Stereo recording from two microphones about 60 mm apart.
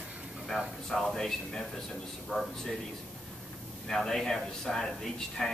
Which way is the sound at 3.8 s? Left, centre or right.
Centre.